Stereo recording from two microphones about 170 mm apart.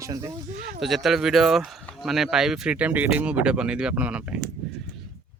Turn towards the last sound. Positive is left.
turn(degrees=-5)  # may be behind; listen again after turning